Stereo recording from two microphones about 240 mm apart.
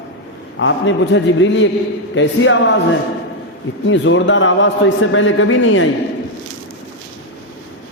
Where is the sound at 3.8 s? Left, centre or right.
Left.